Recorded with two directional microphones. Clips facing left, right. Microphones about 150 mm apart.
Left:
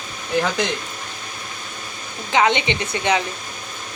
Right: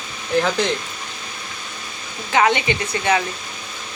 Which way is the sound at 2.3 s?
20° left (ahead or behind).